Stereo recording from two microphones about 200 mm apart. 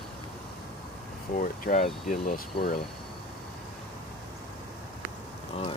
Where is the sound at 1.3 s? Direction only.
40° left (ahead or behind).